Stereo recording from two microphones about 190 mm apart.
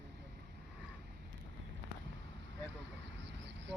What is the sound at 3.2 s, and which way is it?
Vehicle, 70° right (ahead or behind).